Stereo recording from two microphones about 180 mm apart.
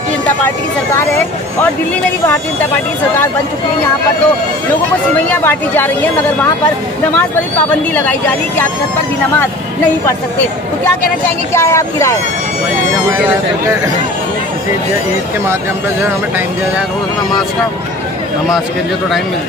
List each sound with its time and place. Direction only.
0.9 s speech: 10° left (ahead or behind)
5.4 s speech: 10° left (ahead or behind)
7.9 s speech: 10° left (ahead or behind)
11.5 s speech: 15° left (ahead or behind)